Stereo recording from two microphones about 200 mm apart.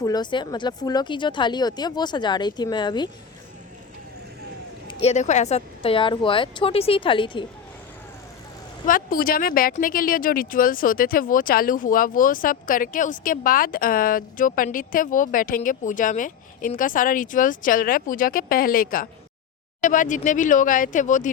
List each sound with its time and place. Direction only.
0.0 s speech: 20° left (ahead or behind)
4.9 s speech: 30° left (ahead or behind)
8.9 s speech: 45° left (ahead or behind)